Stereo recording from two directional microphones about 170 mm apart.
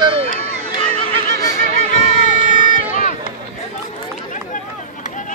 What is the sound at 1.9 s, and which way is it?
Run, 50° left (ahead or behind).